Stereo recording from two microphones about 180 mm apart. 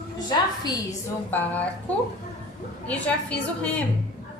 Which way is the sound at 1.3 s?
10° left (ahead or behind).